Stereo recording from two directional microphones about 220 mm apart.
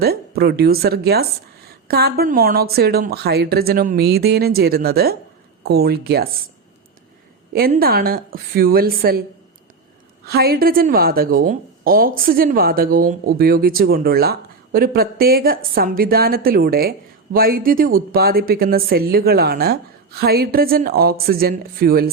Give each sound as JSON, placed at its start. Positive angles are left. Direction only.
{"t": 0.0, "sound": "a woman's voice", "side_deg": -45}
{"t": 7.5, "sound": "a woman's voice", "side_deg": -45}
{"t": 10.2, "sound": "a woman's voice", "side_deg": -45}